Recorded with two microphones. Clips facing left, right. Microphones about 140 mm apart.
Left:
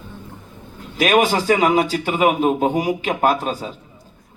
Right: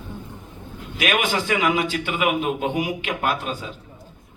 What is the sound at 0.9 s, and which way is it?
A man's voice, 40° left (ahead or behind).